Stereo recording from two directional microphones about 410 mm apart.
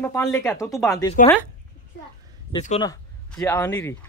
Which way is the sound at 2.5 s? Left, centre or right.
Centre.